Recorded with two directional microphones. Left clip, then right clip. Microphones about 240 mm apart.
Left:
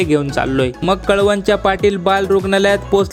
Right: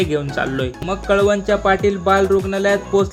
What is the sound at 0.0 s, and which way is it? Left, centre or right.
Speech, left.